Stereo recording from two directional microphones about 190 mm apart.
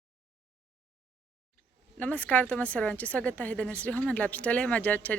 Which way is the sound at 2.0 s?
10° left (ahead or behind).